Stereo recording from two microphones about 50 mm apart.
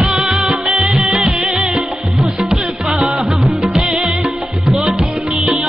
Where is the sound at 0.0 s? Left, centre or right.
Centre.